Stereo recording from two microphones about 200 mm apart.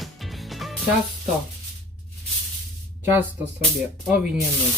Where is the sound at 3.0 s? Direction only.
10° right (ahead or behind).